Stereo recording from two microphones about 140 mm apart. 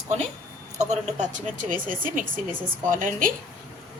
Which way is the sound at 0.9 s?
60° right (ahead or behind).